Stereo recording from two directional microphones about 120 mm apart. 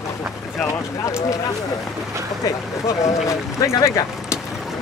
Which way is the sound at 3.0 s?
25° left (ahead or behind).